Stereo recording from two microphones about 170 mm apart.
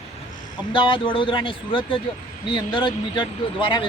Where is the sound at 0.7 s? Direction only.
30° left (ahead or behind).